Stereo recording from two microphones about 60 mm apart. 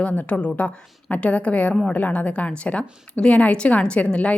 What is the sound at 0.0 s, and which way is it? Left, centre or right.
A woman's voice, left.